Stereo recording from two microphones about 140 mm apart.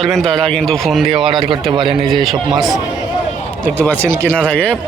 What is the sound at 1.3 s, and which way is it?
Speech, 35° right (ahead or behind).